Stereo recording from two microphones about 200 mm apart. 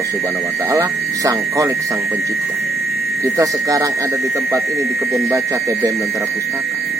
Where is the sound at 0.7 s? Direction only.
15° right (ahead or behind).